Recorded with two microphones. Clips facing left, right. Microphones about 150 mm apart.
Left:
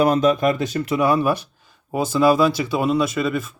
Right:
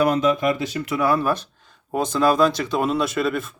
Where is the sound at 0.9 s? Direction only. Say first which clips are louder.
Left 2 dB; 15° left (ahead or behind).